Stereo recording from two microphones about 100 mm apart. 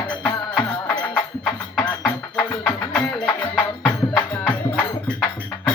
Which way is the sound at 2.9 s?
10° left (ahead or behind).